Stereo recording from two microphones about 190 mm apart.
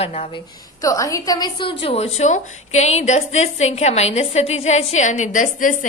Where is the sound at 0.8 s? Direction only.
15° left (ahead or behind).